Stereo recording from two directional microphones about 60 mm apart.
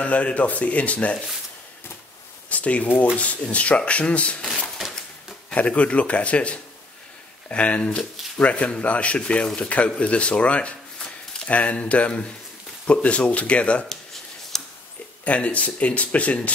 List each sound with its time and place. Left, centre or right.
0.0 s speech: left
2.5 s a sound: left
3.2 s speech: left
5.5 s speech: left
14.5 s a sound: centre
15.2 s speech: left